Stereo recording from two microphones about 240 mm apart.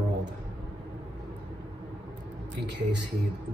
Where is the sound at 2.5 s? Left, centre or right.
Right.